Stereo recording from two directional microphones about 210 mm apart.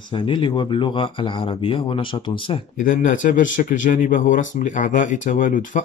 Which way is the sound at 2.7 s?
40° left (ahead or behind).